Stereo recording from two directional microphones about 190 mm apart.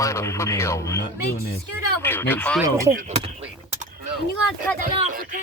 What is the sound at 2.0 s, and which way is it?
Speech, 10° left (ahead or behind).